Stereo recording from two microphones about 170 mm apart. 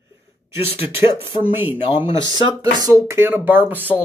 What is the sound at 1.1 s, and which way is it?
Speech, 10° right (ahead or behind).